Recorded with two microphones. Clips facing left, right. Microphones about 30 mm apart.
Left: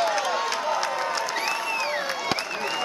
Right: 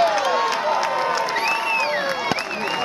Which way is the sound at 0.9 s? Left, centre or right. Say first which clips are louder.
Right 6 dB; right.